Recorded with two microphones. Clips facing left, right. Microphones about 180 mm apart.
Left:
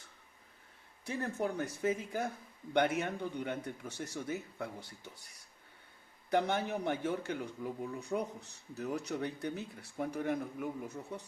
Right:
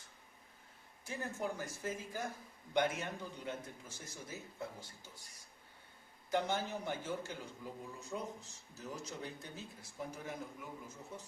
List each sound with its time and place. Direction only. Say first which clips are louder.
1.0 s speech: left 5 dB; 65° left (ahead or behind)
6.3 s speech: left 4 dB; 65° left (ahead or behind)